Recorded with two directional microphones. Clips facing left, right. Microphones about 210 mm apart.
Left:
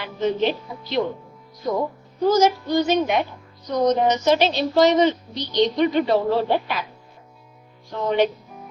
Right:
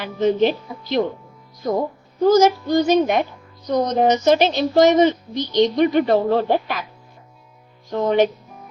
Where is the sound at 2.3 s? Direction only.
45° right (ahead or behind).